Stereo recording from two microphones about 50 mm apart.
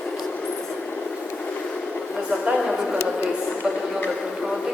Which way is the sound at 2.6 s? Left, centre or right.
Centre.